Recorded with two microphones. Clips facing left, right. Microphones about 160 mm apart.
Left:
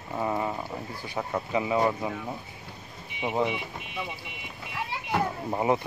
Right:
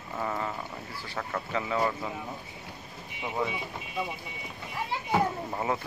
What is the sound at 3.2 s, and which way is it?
Speech, 20° left (ahead or behind).